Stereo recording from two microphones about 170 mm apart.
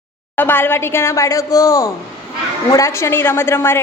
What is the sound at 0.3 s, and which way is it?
A woman's voice, 10° left (ahead or behind).